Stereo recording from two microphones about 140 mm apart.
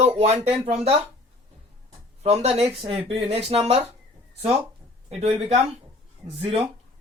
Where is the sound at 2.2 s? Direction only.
50° right (ahead or behind).